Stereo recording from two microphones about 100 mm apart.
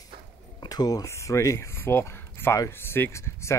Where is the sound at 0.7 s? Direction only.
40° left (ahead or behind).